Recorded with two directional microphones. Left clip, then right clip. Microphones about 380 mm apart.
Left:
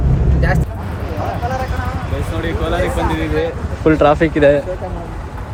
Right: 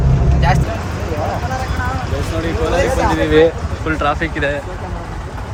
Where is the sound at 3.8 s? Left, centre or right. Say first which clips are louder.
Left 6 dB; centre.